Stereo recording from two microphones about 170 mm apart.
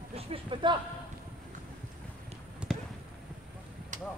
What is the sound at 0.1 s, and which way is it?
Speech, 30° right (ahead or behind).